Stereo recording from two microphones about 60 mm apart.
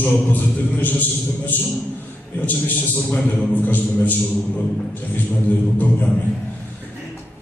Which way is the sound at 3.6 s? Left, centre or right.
Left.